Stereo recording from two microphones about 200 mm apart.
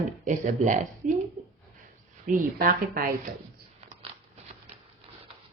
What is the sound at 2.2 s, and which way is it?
Speech, 45° right (ahead or behind).